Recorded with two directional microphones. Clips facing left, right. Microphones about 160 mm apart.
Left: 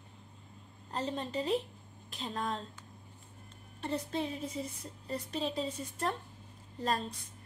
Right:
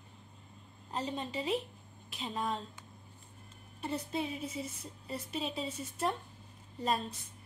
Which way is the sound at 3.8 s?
5° right (ahead or behind).